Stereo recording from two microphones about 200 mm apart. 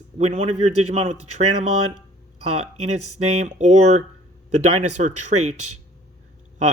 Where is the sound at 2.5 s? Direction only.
30° right (ahead or behind).